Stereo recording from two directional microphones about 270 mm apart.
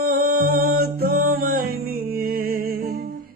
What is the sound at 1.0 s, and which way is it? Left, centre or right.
Music, right.